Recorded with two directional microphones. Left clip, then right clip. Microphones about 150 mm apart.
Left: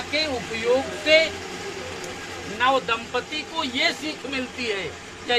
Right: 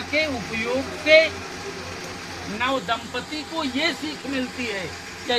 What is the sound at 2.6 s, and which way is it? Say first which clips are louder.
Speech: left 3 dB; 30° left (ahead or behind).